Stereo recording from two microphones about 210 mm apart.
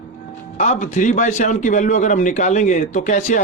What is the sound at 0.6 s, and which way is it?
A man's voice, 35° left (ahead or behind).